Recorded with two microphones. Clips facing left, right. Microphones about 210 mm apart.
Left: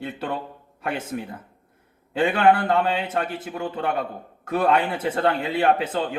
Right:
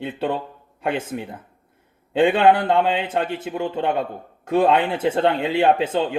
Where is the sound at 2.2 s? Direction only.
25° right (ahead or behind).